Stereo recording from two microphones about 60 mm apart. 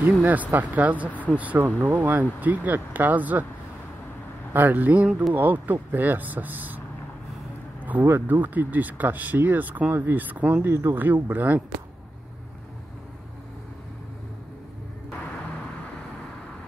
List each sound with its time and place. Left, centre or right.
0.2 s speech: right
4.6 s speech: right
7.8 s speech: right
11.0 s speech: right